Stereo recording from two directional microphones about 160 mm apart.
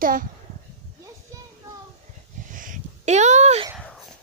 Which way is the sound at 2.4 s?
55° right (ahead or behind).